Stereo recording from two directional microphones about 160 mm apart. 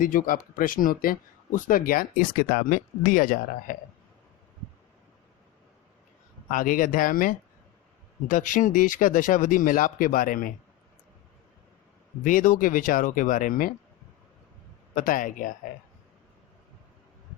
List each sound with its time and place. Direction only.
0.0 s speech: 60° left (ahead or behind)
6.5 s speech: 60° left (ahead or behind)
12.2 s speech: 55° left (ahead or behind)
14.9 s speech: 55° left (ahead or behind)